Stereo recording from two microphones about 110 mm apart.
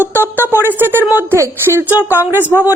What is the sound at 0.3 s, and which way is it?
Speech, 20° right (ahead or behind).